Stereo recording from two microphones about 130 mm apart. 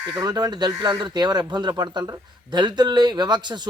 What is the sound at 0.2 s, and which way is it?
Speech, 30° right (ahead or behind).